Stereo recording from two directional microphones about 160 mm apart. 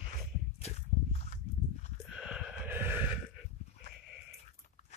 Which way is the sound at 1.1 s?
45° left (ahead or behind).